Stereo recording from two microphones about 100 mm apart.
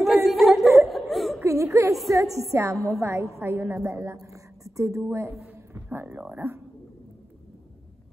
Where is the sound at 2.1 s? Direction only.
30° right (ahead or behind).